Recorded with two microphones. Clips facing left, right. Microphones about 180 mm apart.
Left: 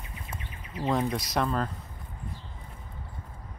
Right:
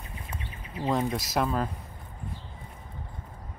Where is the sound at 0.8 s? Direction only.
Centre (ahead or behind).